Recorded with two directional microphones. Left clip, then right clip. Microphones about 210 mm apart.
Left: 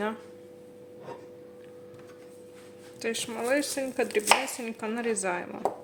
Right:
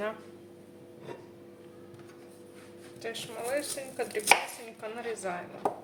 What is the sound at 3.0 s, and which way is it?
Speech, 50° left (ahead or behind).